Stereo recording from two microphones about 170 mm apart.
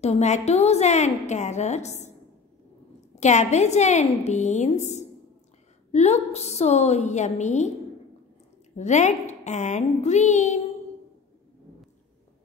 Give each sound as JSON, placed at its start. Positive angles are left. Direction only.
{"t": 0.0, "sound": "a woman's voice", "side_deg": 40}
{"t": 3.2, "sound": "a woman's voice", "side_deg": 40}
{"t": 8.7, "sound": "a woman's voice", "side_deg": 45}